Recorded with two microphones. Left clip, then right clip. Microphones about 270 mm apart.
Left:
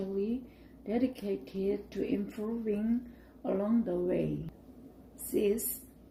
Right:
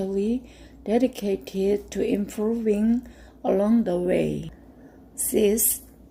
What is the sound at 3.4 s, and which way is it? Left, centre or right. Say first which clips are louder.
Speech: right 10 dB; right.